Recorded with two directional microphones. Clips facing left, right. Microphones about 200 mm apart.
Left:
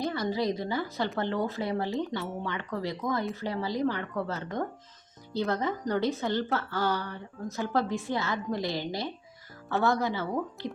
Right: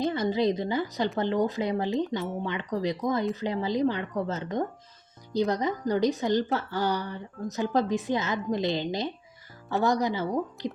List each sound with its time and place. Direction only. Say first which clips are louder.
0.0 s a woman's voice: right 4 dB; 20° right (ahead or behind)